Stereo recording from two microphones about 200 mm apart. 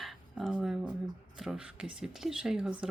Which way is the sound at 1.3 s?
5° right (ahead or behind).